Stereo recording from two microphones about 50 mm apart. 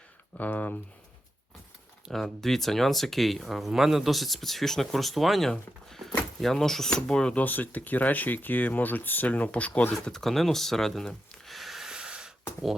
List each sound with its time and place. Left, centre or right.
0.3 s speech: left
2.1 s speech: centre
7.3 s speech: left
10.1 s speech: centre
11.9 s snort: centre